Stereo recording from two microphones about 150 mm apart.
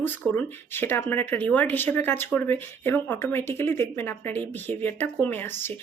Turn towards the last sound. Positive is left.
turn(degrees=15)  # may be behind; listen again after turning